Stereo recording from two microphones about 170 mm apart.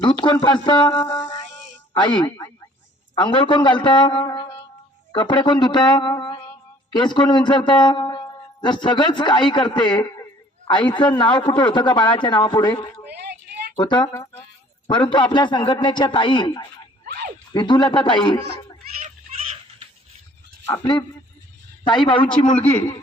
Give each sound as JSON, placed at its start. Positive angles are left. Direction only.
{"t": 0.0, "sound": "a man's voice", "side_deg": 30}
{"t": 14.1, "sound": "speech", "side_deg": 15}
{"t": 14.8, "sound": "a man's voice", "side_deg": 30}
{"t": 20.7, "sound": "a man's voice", "side_deg": 20}
{"t": 22.0, "sound": "a man's voice", "side_deg": 30}